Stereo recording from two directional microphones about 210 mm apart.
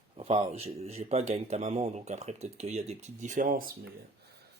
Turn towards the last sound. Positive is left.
turn(degrees=-40)  # may be behind; listen again after turning